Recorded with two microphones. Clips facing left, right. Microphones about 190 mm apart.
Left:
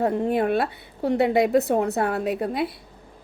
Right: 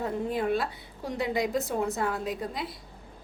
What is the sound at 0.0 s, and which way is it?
Speech, 65° left (ahead or behind).